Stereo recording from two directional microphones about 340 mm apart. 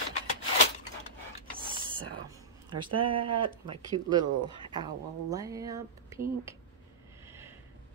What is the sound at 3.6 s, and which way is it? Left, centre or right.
Speech, centre.